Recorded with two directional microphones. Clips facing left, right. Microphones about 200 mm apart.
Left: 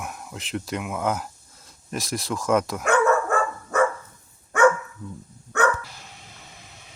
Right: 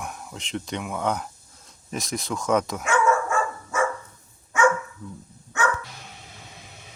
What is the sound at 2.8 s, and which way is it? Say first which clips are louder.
Dog: left 2 dB; 60° left (ahead or behind).